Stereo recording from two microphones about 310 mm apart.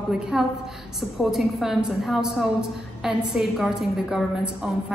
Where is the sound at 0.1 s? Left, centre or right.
Centre.